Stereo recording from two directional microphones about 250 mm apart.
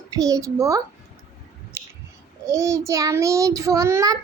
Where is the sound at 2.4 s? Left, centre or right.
Centre.